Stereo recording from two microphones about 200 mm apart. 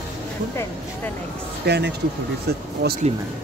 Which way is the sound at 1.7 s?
55° right (ahead or behind).